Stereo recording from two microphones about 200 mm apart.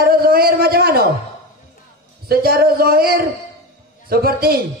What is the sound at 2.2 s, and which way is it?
A man's voice, 50° right (ahead or behind).